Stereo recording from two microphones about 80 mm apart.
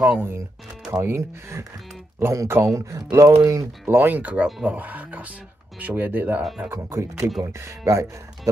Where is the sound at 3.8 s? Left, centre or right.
Right.